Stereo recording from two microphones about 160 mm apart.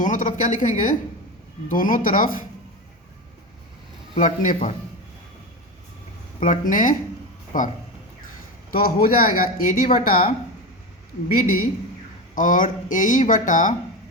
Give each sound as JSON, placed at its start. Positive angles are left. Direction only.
{"t": 0.0, "sound": "speech", "side_deg": 50}
{"t": 4.1, "sound": "speech", "side_deg": 50}
{"t": 6.4, "sound": "speech", "side_deg": 55}
{"t": 8.7, "sound": "speech", "side_deg": 65}
{"t": 11.3, "sound": "speech", "side_deg": 65}